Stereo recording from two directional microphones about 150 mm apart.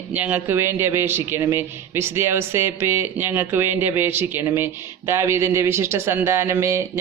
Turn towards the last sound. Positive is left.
turn(degrees=-20)  # may be behind; listen again after turning